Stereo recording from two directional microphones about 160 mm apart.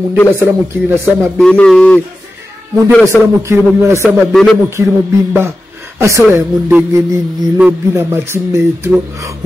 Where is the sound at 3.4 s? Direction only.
15° right (ahead or behind).